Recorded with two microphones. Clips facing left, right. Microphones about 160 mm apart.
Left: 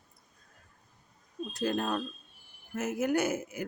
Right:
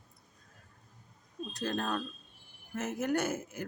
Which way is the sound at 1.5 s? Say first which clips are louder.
Left 3 dB; 10° left (ahead or behind).